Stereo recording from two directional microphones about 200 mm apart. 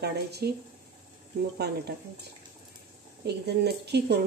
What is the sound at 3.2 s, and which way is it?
Speech, 55° right (ahead or behind).